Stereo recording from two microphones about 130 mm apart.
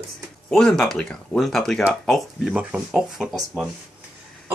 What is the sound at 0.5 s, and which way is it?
Speech, 5° left (ahead or behind).